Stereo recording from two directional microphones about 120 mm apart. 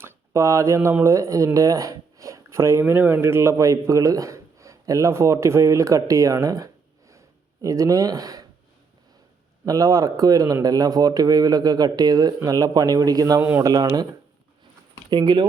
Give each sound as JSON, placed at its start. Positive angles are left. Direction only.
{"t": 0.0, "sound": "speech", "side_deg": -25}
{"t": 7.1, "sound": "a sound", "side_deg": -25}
{"t": 9.6, "sound": "speech", "side_deg": -30}
{"t": 15.1, "sound": "speech", "side_deg": -35}